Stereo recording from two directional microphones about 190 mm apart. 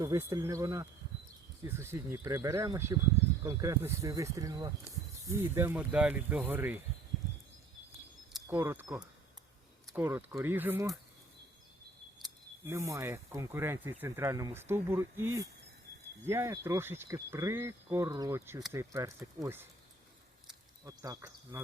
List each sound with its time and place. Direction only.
0.0 s speech: 15° right (ahead or behind)
8.4 s speech: 15° right (ahead or behind)
12.6 s speech: 15° right (ahead or behind)
20.8 s speech: 15° right (ahead or behind)